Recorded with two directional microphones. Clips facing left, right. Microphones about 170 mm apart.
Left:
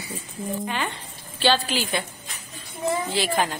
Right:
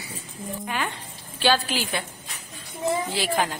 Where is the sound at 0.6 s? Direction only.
Centre (ahead or behind).